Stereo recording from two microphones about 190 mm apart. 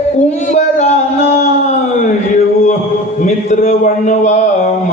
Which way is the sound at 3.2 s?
40° left (ahead or behind).